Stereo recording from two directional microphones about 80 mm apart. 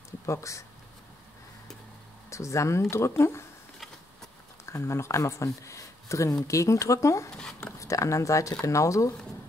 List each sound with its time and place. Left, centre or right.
0.3 s speech: left
2.2 s speech: left
4.7 s speech: left
7.3 s speech: centre
7.8 s speech: left